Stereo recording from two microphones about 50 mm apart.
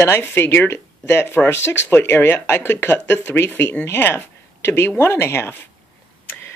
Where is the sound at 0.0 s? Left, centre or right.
Left.